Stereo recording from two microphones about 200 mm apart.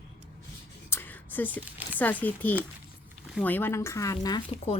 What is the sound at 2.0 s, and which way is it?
Speech, 10° left (ahead or behind).